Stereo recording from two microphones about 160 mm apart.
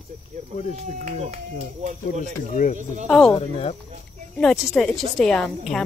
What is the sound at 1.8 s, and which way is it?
Speech, 50° right (ahead or behind).